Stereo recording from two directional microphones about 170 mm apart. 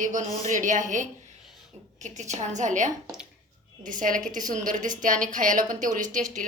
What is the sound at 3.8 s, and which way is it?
A woman's voice, 50° right (ahead or behind).